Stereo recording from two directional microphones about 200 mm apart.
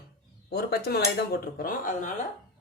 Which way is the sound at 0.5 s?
50° left (ahead or behind).